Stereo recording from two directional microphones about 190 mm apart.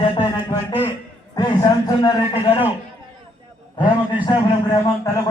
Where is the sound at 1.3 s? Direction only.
20° left (ahead or behind).